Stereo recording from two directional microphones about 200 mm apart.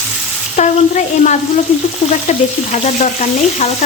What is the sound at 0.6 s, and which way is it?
Frying, 35° left (ahead or behind).